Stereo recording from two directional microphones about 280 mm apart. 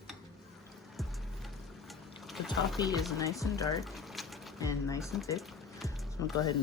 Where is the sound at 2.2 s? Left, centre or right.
Centre.